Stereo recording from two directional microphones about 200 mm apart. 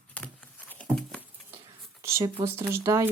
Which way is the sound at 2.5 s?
15° right (ahead or behind).